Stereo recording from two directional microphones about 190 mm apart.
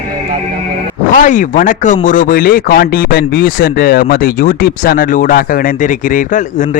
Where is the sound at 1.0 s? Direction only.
40° left (ahead or behind).